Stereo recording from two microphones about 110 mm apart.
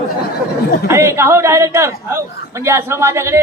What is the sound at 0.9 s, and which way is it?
A man's voice, 25° right (ahead or behind).